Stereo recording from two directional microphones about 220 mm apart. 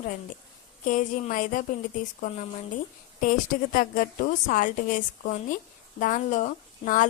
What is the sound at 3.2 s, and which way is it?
Speech, 40° left (ahead or behind).